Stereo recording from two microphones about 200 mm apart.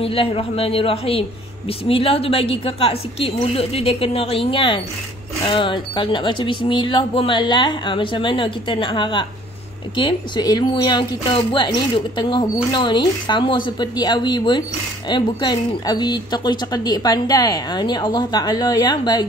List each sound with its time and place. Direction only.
0.0 s speech: 30° left (ahead or behind)